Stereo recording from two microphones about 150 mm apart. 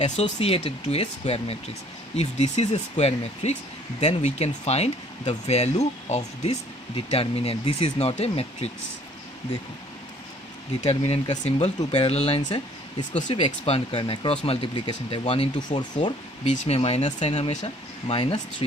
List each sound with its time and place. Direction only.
0.0 s speech: 40° left (ahead or behind)
10.8 s speech: 45° left (ahead or behind)
12.5 s speech: 30° left (ahead or behind)
13.4 s speech: 40° left (ahead or behind)